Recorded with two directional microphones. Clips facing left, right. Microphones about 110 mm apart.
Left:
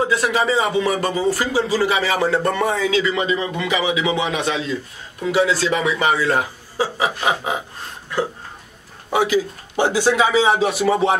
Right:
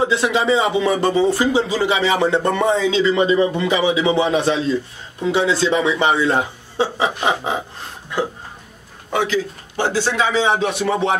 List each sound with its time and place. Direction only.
0.0 s speech: 25° right (ahead or behind)
9.1 s a man's voice: 10° left (ahead or behind)